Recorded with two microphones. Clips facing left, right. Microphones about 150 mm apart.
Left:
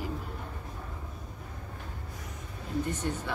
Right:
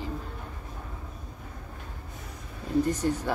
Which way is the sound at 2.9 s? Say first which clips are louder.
Right 6 dB; 40° right (ahead or behind).